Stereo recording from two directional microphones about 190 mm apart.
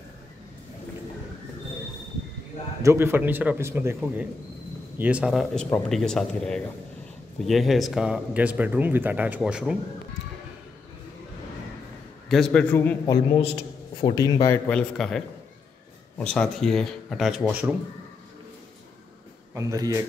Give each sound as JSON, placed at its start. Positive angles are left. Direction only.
{"t": 2.8, "sound": "speech", "side_deg": -15}
{"t": 12.3, "sound": "speech", "side_deg": 0}
{"t": 13.0, "sound": "a man's voice", "side_deg": 25}
{"t": 14.7, "sound": "speech", "side_deg": 5}
{"t": 19.5, "sound": "speech", "side_deg": -15}